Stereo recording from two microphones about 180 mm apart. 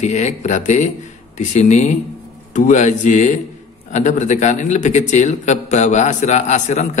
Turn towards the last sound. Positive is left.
turn(degrees=40)  # may be behind; listen again after turning